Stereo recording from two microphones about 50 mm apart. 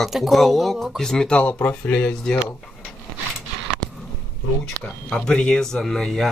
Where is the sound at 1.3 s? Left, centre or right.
Left.